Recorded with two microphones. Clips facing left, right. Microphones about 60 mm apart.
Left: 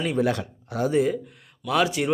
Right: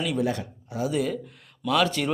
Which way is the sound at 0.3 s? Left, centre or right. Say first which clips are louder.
Left 3 dB; left.